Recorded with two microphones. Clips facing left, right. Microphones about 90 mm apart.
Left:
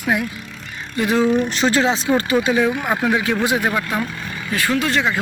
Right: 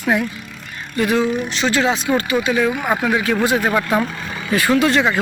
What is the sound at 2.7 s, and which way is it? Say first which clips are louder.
Speech: right 1 dB; 15° right (ahead or behind).